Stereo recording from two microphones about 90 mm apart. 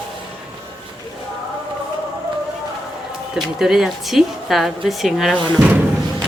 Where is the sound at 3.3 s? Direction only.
5° right (ahead or behind).